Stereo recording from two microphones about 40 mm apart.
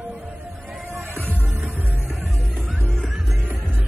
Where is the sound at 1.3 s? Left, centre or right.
Right.